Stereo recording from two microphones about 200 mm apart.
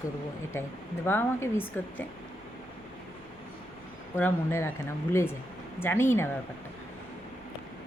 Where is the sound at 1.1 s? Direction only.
10° left (ahead or behind).